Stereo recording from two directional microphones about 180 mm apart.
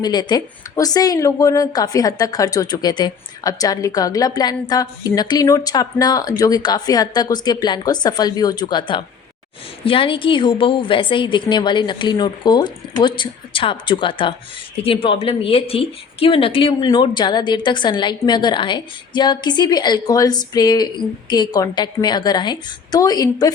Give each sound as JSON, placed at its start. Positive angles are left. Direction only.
{"t": 0.0, "sound": "speech", "side_deg": 25}